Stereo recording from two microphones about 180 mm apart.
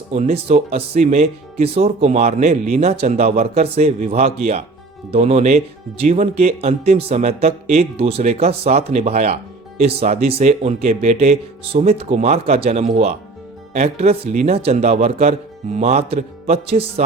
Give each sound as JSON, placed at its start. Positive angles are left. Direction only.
{"t": 0.1, "sound": "speech", "side_deg": -35}